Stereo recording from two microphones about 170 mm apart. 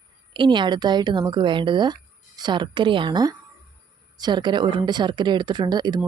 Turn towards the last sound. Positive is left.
turn(degrees=-25)  # may be behind; listen again after turning